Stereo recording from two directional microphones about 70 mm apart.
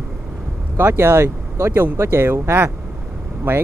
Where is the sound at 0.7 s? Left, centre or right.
Right.